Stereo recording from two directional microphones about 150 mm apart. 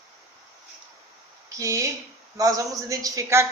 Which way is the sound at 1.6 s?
20° right (ahead or behind).